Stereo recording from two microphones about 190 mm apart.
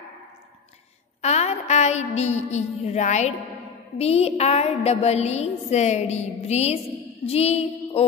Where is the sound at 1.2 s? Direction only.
35° left (ahead or behind).